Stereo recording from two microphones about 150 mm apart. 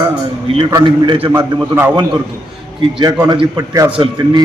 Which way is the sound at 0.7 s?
30° right (ahead or behind).